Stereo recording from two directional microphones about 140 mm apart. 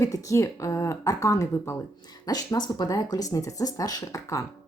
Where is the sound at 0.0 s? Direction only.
25° left (ahead or behind).